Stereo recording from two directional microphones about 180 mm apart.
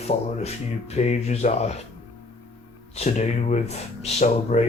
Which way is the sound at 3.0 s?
40° left (ahead or behind).